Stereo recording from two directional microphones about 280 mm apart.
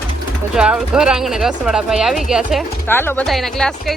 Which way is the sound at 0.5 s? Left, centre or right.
Centre.